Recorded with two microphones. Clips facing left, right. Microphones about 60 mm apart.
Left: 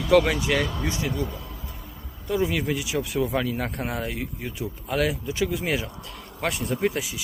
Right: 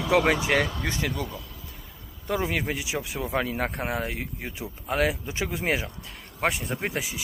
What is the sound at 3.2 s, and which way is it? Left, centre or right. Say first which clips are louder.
Speech: left 1 dB; right.